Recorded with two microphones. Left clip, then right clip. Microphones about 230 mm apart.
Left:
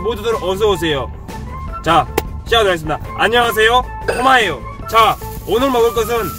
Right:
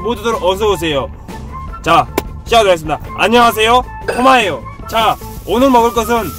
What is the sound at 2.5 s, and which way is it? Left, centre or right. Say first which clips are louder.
Speech: right 4 dB; centre.